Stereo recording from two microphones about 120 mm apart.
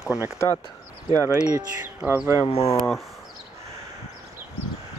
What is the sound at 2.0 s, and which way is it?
Speech, 5° right (ahead or behind).